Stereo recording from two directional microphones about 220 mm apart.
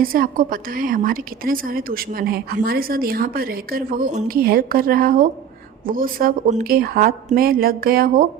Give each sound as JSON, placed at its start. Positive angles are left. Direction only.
{"t": 0.0, "sound": "a woman's voice", "side_deg": -40}